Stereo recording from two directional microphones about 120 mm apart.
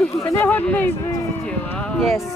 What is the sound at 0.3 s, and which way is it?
Speech, 15° left (ahead or behind).